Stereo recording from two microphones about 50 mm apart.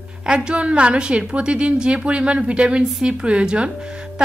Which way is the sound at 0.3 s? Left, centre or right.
Centre.